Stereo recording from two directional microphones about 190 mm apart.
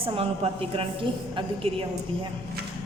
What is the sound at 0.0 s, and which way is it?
A man's voice, 30° right (ahead or behind).